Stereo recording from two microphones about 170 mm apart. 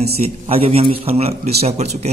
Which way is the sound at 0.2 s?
35° right (ahead or behind).